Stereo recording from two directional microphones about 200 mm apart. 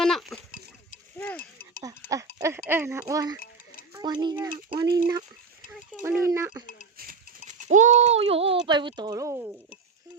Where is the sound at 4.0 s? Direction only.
20° right (ahead or behind).